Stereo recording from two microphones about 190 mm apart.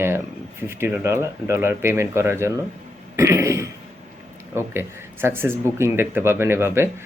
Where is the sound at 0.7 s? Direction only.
15° right (ahead or behind).